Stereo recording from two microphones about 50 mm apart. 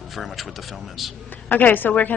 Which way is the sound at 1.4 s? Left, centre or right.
Left.